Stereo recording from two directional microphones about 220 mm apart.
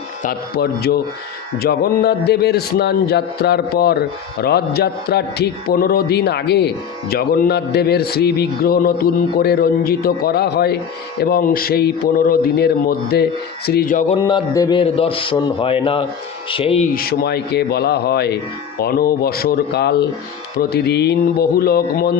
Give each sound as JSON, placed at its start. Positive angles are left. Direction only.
{"t": 0.2, "sound": "a man's voice", "side_deg": 45}
{"t": 13.7, "sound": "a sound", "side_deg": 40}
{"t": 14.3, "sound": "a man's voice", "side_deg": 20}
{"t": 16.9, "sound": "a man's voice", "side_deg": 45}